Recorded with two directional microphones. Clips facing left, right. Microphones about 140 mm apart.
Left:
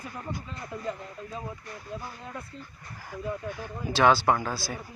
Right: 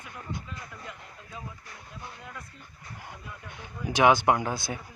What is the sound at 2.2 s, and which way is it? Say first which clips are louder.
Speech: left 4 dB; 30° left (ahead or behind).